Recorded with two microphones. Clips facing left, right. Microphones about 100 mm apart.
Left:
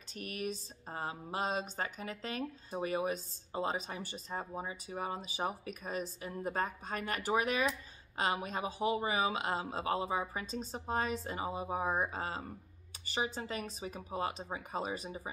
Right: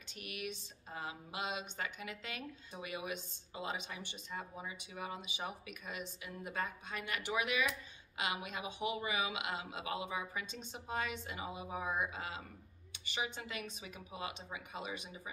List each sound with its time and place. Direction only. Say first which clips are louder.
0.1 s speech: left 5 dB; 40° left (ahead or behind)